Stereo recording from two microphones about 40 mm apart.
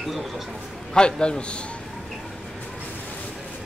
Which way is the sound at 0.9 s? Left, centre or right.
Left.